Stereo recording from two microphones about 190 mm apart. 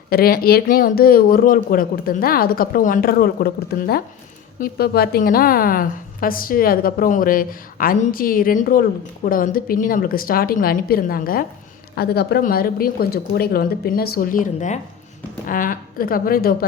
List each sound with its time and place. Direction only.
0.1 s a woman's voice: 55° left (ahead or behind)